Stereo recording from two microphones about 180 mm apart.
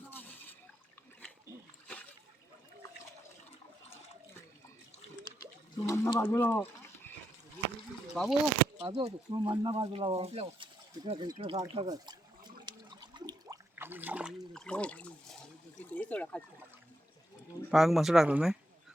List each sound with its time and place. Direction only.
0.1 s a sound: 10° left (ahead or behind)
5.7 s speech: 15° left (ahead or behind)
8.1 s speech: 5° left (ahead or behind)
8.9 s speech: 25° right (ahead or behind)
11.9 s water: 25° right (ahead or behind); by 14.3 s 10° right (ahead or behind)
14.5 s speech: 5° left (ahead or behind)
17.7 s speech: centre (ahead or behind)